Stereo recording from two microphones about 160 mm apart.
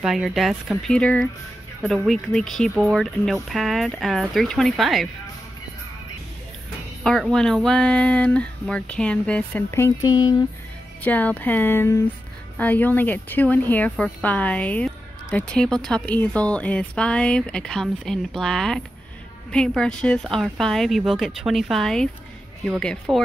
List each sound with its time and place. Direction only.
0.0 s speech: 5° right (ahead or behind)
7.0 s speech: centre (ahead or behind); by 10.3 s 25° left (ahead or behind)
11.0 s speech: 10° left (ahead or behind)